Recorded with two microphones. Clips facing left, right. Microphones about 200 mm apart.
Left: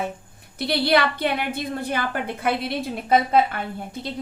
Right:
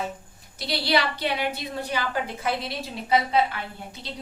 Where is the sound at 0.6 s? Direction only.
55° left (ahead or behind).